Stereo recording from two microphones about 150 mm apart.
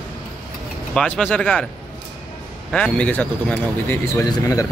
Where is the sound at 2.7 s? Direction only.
5° left (ahead or behind).